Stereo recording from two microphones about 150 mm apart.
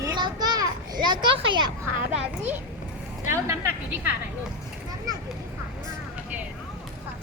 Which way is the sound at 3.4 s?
20° right (ahead or behind).